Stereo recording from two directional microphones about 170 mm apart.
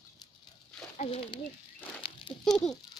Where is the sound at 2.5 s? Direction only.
Centre (ahead or behind).